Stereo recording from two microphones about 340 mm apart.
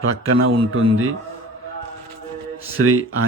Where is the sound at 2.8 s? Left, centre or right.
Right.